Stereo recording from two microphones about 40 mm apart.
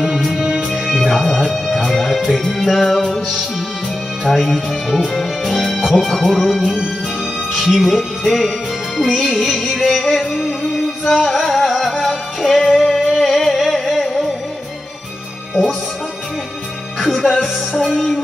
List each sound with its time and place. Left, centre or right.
0.4 s music: centre
0.9 s music: centre
1.3 s speech: centre
4.4 s speech: centre
11.2 s music: centre
13.2 s a sound: centre
17.1 s music: centre
17.9 s speech: centre